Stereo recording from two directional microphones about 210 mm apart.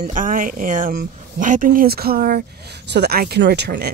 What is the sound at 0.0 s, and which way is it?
Speech, 40° right (ahead or behind).